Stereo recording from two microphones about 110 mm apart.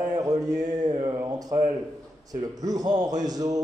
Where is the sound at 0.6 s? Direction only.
90° right.